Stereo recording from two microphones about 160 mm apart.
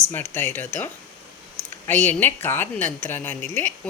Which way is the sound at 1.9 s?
10° left (ahead or behind).